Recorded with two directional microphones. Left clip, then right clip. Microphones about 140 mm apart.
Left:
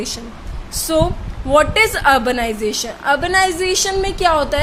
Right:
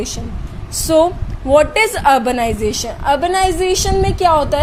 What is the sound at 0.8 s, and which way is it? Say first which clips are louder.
A woman's voice: right 4 dB; 35° right (ahead or behind).